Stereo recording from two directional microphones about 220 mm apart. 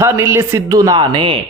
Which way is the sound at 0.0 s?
10° right (ahead or behind).